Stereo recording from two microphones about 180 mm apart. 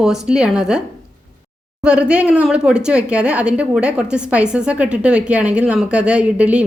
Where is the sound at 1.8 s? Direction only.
5° right (ahead or behind).